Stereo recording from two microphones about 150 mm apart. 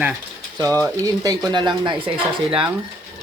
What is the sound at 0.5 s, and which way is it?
Speech, 25° right (ahead or behind).